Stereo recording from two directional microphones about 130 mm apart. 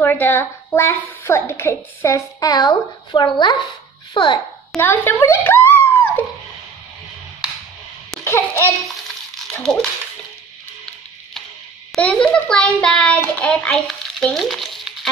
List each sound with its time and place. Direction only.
0.0 s a woman's voice: 15° left (ahead or behind); by 4.8 s 35° left (ahead or behind)
4.8 s a child's voice: 15° left (ahead or behind)
8.2 s laughter: 20° left (ahead or behind)
8.8 s a sound: 5° left (ahead or behind)
12.0 s a child's voice: 10° left (ahead or behind)